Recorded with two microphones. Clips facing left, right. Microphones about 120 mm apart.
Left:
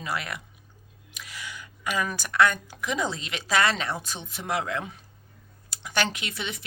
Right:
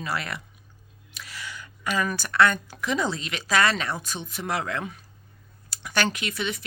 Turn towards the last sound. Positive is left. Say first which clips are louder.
# right 5 dB
turn(degrees=25)  # may be behind; listen again after turning